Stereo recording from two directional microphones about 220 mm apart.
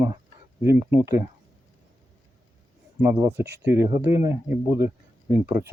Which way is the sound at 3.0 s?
10° right (ahead or behind).